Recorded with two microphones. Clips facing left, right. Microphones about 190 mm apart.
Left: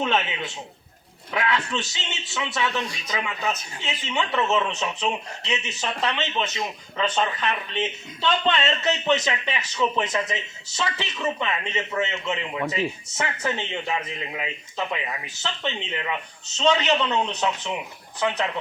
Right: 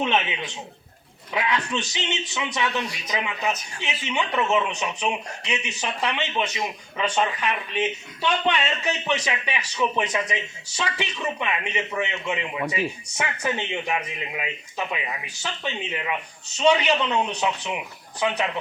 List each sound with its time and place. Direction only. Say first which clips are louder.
0.0 s speech: even; 15° right (ahead or behind)